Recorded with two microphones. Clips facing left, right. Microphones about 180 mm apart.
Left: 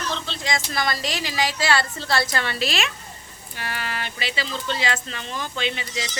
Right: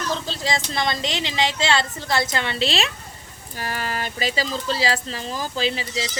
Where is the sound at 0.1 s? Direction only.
35° right (ahead or behind).